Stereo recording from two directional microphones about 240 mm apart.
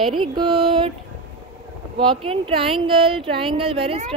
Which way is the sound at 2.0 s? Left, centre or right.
Right.